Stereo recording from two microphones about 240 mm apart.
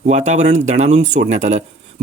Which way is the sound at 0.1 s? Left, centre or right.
Right.